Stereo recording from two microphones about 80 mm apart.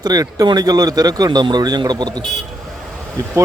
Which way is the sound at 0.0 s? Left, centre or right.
Right.